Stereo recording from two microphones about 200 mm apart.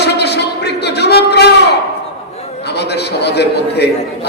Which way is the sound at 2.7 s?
55° left (ahead or behind).